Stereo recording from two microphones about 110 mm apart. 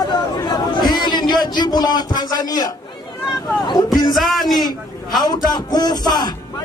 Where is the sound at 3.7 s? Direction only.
40° left (ahead or behind).